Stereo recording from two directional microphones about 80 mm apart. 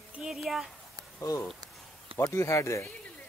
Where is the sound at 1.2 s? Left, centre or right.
Left.